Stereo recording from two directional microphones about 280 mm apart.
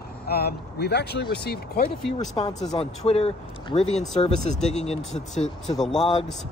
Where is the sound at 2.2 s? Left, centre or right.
Centre.